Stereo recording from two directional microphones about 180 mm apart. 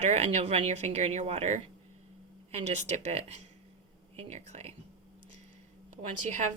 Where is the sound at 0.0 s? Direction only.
35° right (ahead or behind).